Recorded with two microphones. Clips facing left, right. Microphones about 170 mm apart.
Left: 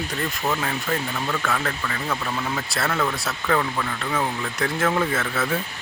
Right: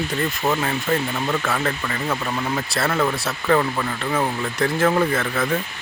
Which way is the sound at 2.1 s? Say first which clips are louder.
Right 3 dB; 15° right (ahead or behind).